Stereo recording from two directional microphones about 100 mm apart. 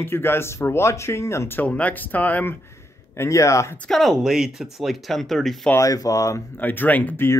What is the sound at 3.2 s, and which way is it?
Speech, 30° left (ahead or behind).